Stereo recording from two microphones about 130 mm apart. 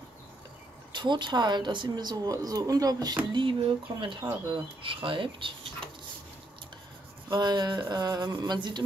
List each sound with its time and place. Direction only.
0.9 s speech: 35° right (ahead or behind)
3.3 s speech: 40° right (ahead or behind)
7.2 s speech: 35° right (ahead or behind)